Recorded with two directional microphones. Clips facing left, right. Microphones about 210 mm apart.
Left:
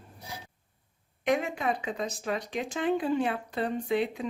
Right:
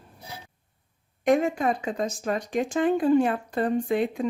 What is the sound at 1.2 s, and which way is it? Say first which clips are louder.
Speech: right 6 dB; 45° right (ahead or behind).